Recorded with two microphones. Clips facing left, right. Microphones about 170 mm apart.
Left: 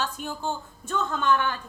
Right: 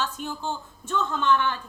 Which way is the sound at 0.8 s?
50° left (ahead or behind).